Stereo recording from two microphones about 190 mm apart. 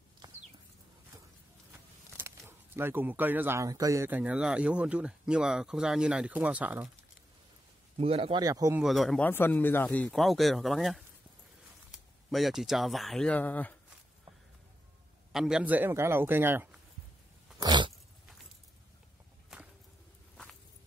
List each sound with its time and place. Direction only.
0.2 s a sound: 20° right (ahead or behind)
1.7 s speech: 10° right (ahead or behind)
8.0 s speech: 30° right (ahead or behind)
8.8 s speech: centre (ahead or behind)
12.3 s speech: centre (ahead or behind)
15.3 s a man's voice: 5° right (ahead or behind)
17.6 s dog: 25° right (ahead or behind)